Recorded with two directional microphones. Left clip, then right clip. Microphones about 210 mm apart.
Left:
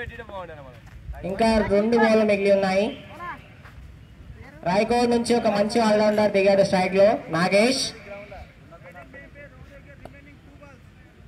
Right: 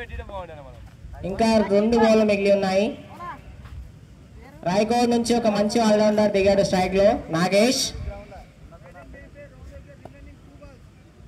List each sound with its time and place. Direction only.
0.0 s speech: 50° left (ahead or behind)
1.2 s speech: 50° right (ahead or behind)
4.6 s speech: 50° right (ahead or behind)